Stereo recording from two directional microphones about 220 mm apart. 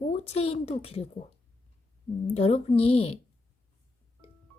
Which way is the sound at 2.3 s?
30° left (ahead or behind).